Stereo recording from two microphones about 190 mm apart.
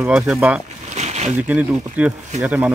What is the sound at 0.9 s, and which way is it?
Boat, 35° right (ahead or behind).